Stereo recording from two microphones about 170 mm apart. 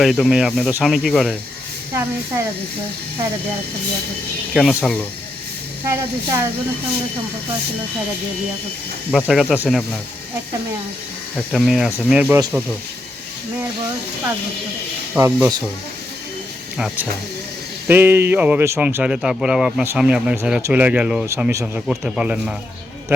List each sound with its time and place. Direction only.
0.0 s speech: centre (ahead or behind)
1.9 s speech: 15° right (ahead or behind)
4.5 s speech: 5° left (ahead or behind)
5.8 s speech: 15° right (ahead or behind)
9.2 s speech: 5° right (ahead or behind)
11.5 s speech: 5° right (ahead or behind)
15.2 s speech: 20° right (ahead or behind)
16.7 s speech: 5° right (ahead or behind)
21.8 s speech: 5° right (ahead or behind)